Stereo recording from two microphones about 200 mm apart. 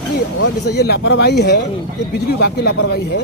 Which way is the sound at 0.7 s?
55° left (ahead or behind).